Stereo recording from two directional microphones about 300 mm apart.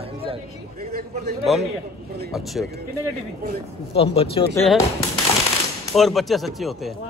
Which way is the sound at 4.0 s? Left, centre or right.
Centre.